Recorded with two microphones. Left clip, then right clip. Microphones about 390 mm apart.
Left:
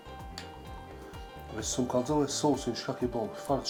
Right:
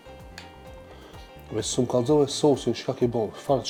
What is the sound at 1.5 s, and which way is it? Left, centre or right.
Speech, right.